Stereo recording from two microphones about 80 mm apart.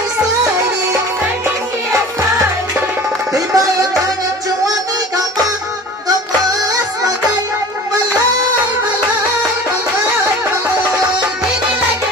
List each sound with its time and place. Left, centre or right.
3.3 s music: right
7.0 s music: right